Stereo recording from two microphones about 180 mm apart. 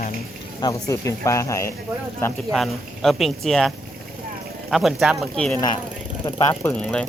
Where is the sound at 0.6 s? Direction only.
20° left (ahead or behind).